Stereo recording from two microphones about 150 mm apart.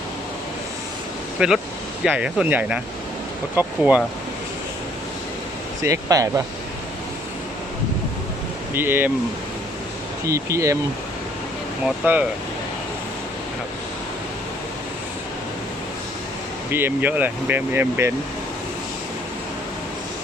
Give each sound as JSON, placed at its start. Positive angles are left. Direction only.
{"t": 1.4, "sound": "speech", "side_deg": -5}
{"t": 5.8, "sound": "speech", "side_deg": -20}
{"t": 8.7, "sound": "speech", "side_deg": -15}
{"t": 10.2, "sound": "speech", "side_deg": -20}
{"t": 12.0, "sound": "speech", "side_deg": -10}
{"t": 16.7, "sound": "speech", "side_deg": -15}